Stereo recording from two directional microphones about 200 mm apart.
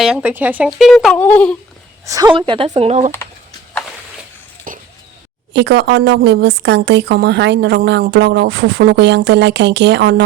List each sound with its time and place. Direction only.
0.0 s speech: 5° right (ahead or behind)
2.0 s speech: 15° right (ahead or behind); by 3.1 s 35° right (ahead or behind)
4.7 s a sound: 40° right (ahead or behind)
5.5 s speech: 60° right (ahead or behind)